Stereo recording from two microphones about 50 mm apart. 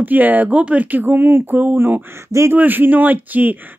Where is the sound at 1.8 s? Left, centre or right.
Right.